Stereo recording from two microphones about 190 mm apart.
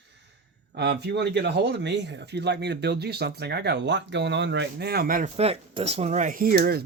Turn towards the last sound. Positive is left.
turn(degrees=-50)  # may be behind; listen again after turning